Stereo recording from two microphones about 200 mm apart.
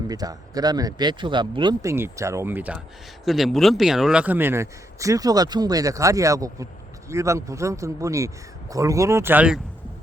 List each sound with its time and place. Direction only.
0.1 s speech: 20° right (ahead or behind)